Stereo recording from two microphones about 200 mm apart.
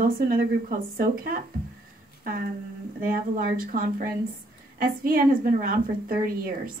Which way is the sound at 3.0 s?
45° right (ahead or behind).